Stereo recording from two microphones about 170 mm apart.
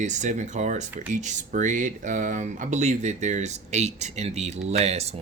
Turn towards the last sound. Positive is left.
turn(degrees=-40)  # may be behind; listen again after turning